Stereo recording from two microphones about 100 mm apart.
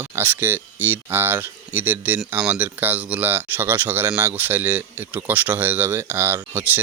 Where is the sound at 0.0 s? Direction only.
20° right (ahead or behind).